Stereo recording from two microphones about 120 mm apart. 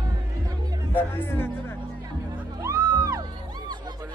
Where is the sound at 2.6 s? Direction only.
25° right (ahead or behind).